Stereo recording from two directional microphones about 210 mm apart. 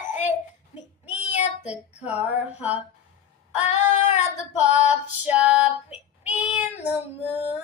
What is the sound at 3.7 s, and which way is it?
Female singing, 35° left (ahead or behind).